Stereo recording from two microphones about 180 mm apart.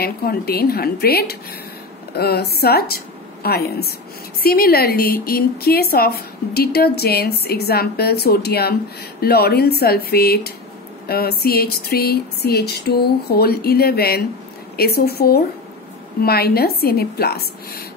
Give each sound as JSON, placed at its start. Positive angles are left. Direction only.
{"t": 0.0, "sound": "a woman's voice", "side_deg": 60}